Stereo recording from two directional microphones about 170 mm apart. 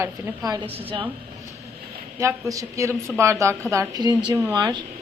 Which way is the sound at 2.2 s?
20° right (ahead or behind).